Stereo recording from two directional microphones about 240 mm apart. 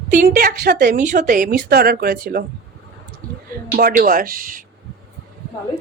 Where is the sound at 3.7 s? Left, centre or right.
Right.